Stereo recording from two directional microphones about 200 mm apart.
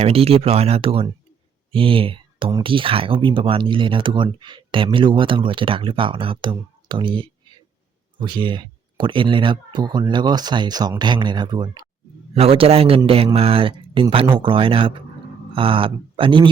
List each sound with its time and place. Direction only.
0.0 s speech: 30° right (ahead or behind)